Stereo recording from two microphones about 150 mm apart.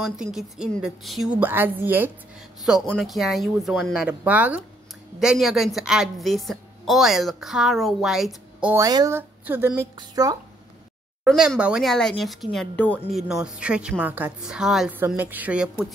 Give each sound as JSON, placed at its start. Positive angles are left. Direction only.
{"t": 0.3, "sound": "a woman's voice", "side_deg": -5}
{"t": 1.4, "sound": "speech", "side_deg": -15}
{"t": 2.9, "sound": "a woman's voice", "side_deg": 0}
{"t": 8.7, "sound": "speech", "side_deg": -25}
{"t": 11.2, "sound": "a woman's voice", "side_deg": -5}
{"t": 13.1, "sound": "a woman's voice", "side_deg": -5}
{"t": 15.0, "sound": "speech", "side_deg": -15}